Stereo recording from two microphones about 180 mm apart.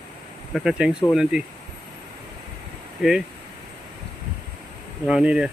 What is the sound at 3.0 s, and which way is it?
Speech, centre (ahead or behind).